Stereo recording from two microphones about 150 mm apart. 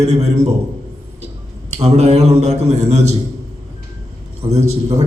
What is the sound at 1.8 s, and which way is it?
A man's voice, 45° right (ahead or behind).